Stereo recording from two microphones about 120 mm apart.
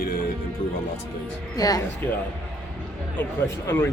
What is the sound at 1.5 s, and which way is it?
Speech, 30° left (ahead or behind).